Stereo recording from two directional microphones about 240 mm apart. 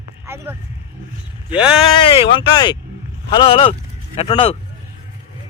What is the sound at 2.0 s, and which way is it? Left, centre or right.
Speech, left.